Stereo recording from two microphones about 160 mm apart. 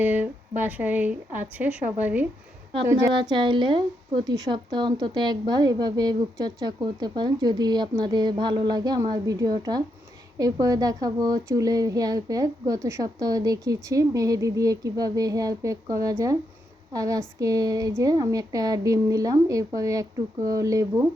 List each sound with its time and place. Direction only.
0.0 s speech: 10° right (ahead or behind)
3.1 s a woman's voice: 30° right (ahead or behind)